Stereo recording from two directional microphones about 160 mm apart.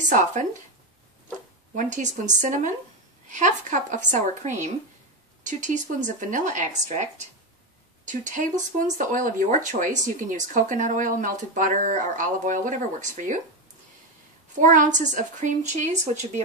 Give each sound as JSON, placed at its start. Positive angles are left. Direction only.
{"t": 0.1, "sound": "speech", "side_deg": -50}
{"t": 1.8, "sound": "speech", "side_deg": -50}
{"t": 8.1, "sound": "speech", "side_deg": -55}
{"t": 14.6, "sound": "speech", "side_deg": -50}